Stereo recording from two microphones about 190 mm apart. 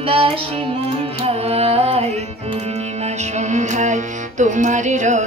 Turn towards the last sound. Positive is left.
turn(degrees=-40)  # may be behind; listen again after turning